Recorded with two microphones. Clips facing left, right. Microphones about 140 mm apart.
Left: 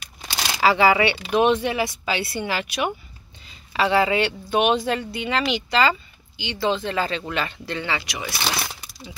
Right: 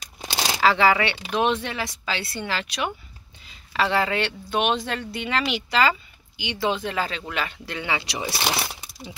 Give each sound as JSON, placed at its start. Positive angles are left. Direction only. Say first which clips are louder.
{"t": 0.6, "sound": "speech", "louder": "left 2 dB", "side_deg": 5}
{"t": 8.0, "sound": "speech", "louder": "right 2 dB", "side_deg": -30}
{"t": 8.5, "sound": "speech", "louder": "even", "side_deg": -10}